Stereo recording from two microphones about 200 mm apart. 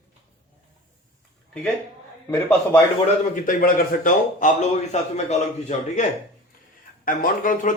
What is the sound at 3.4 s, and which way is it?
A man's voice, 45° left (ahead or behind).